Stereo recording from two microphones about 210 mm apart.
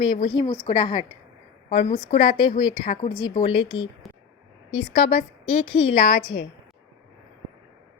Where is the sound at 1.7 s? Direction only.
35° left (ahead or behind).